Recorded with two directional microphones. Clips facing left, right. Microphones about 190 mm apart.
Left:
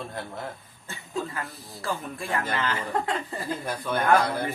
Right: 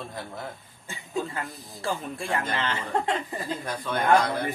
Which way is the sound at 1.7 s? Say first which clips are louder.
Right 1 dB; 25° right (ahead or behind).